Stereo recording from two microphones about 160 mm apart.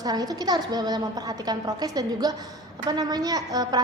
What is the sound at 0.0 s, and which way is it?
A woman's voice, 25° right (ahead or behind).